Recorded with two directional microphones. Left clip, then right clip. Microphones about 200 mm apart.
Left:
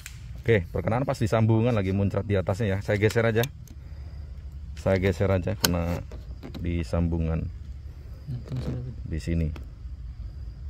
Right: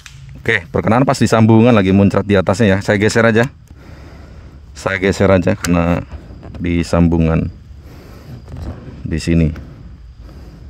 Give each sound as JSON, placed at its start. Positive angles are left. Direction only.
{"t": 0.4, "sound": "speech", "side_deg": -50}
{"t": 4.8, "sound": "speech", "side_deg": -55}
{"t": 9.1, "sound": "speech", "side_deg": -55}